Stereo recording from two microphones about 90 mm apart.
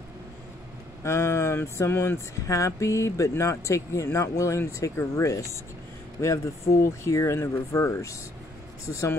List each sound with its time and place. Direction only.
1.0 s speech: 30° left (ahead or behind)